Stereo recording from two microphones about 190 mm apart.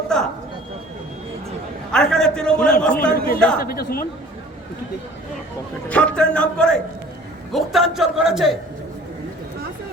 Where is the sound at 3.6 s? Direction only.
50° left (ahead or behind).